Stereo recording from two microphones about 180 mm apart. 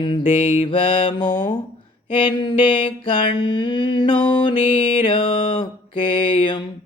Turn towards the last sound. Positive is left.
turn(degrees=30)  # may be behind; listen again after turning